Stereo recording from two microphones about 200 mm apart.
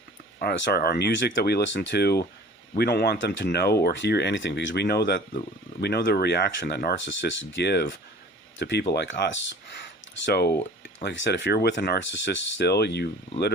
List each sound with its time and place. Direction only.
0.3 s speech: 60° left (ahead or behind)